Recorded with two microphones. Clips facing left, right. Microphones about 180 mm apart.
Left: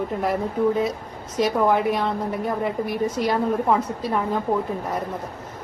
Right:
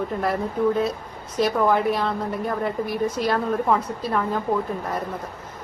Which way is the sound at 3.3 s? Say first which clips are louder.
Left 1 dB; 15° left (ahead or behind).